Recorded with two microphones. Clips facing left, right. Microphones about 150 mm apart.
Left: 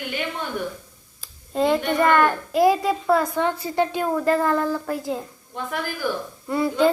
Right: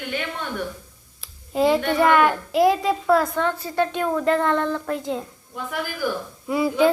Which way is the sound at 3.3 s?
15° left (ahead or behind).